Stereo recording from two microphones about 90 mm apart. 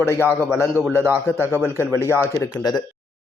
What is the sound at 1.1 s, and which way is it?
Speech, 25° right (ahead or behind).